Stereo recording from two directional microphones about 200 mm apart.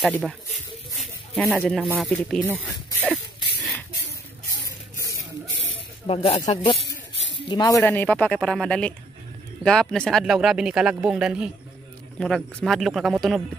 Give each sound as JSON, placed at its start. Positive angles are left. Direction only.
{"t": 0.0, "sound": "speech", "side_deg": 0}
{"t": 0.9, "sound": "a sound", "side_deg": 0}
{"t": 2.0, "sound": "speech", "side_deg": 5}
{"t": 6.0, "sound": "speech", "side_deg": 30}
{"t": 7.7, "sound": "speech", "side_deg": 10}